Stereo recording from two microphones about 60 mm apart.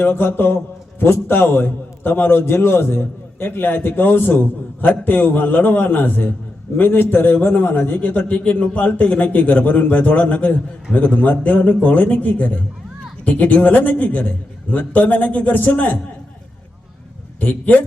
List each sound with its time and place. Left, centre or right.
0.0 s a man's voice: left
17.4 s a man's voice: left